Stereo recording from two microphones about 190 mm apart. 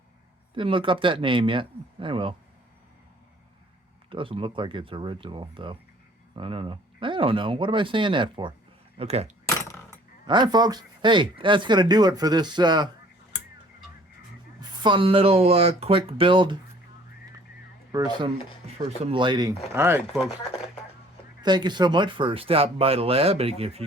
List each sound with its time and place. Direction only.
0.5 s speech: 25° right (ahead or behind)
4.1 s speech: 25° right (ahead or behind)
14.6 s speech: 20° right (ahead or behind)
17.9 s speech: 20° right (ahead or behind)
18.6 s speech: 35° right (ahead or behind)
19.7 s speech: 10° right (ahead or behind)
21.4 s speech: 25° right (ahead or behind)